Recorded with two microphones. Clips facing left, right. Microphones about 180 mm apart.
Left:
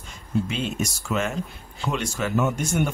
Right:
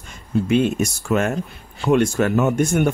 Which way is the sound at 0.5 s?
55° right (ahead or behind).